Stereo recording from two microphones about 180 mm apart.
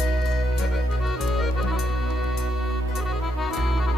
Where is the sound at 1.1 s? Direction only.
Centre (ahead or behind).